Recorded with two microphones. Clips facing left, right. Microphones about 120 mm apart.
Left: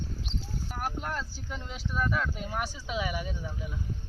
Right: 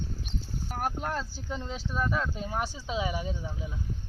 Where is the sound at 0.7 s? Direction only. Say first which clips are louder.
Right 3 dB; 40° right (ahead or behind).